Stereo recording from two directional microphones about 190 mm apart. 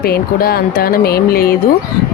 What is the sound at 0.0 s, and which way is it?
Speech, 55° left (ahead or behind).